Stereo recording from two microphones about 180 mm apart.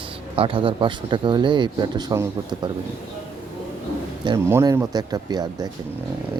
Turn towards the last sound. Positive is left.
turn(degrees=-20)  # may be behind; listen again after turning